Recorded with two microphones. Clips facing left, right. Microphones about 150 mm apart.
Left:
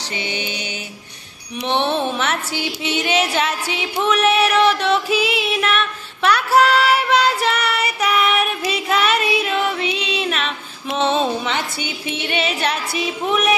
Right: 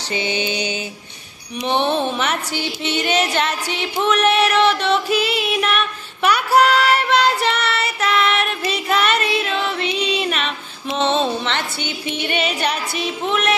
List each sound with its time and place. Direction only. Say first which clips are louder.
0.1 s mantra: right 5 dB; 25° right (ahead or behind)
1.6 s a woman's voice: right 1 dB; centre (ahead or behind)